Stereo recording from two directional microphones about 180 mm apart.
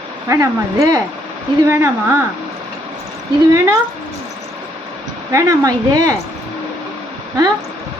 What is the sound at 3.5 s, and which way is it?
Speech, 15° right (ahead or behind).